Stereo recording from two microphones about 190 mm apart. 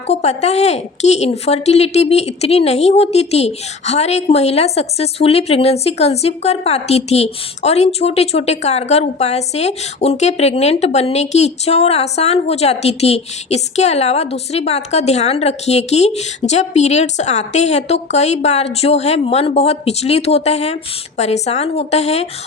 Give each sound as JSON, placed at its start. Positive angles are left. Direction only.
{"t": 0.1, "sound": "a woman's voice", "side_deg": 35}